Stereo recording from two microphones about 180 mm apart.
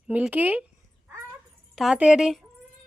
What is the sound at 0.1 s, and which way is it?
Speech, 10° right (ahead or behind).